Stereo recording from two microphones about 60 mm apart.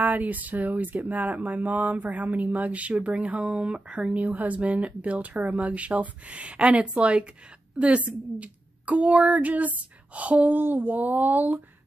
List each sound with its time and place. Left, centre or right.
0.0 s speech: right